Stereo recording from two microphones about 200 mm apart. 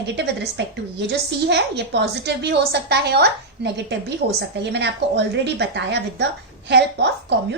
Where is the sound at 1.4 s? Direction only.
60° right (ahead or behind).